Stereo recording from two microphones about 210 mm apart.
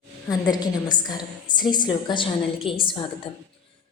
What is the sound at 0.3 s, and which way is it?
A woman's voice, 20° left (ahead or behind).